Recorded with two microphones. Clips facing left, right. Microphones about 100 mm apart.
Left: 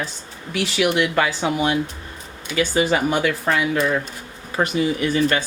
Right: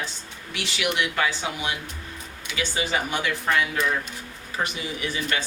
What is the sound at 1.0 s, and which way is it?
Speech, 45° left (ahead or behind).